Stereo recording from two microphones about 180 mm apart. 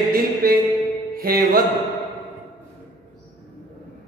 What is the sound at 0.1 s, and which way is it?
Mantra, 55° right (ahead or behind).